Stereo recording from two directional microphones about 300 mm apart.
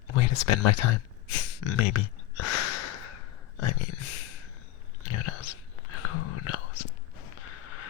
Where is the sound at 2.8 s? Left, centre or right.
Left.